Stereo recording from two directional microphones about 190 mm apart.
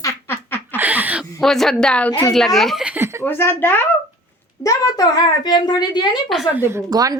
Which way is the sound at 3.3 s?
10° left (ahead or behind).